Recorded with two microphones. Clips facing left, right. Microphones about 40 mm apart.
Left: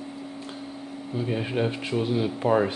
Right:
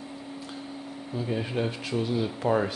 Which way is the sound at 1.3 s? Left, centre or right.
Centre.